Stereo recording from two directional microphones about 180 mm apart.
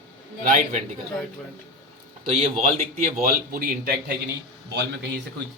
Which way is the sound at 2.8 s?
45° right (ahead or behind).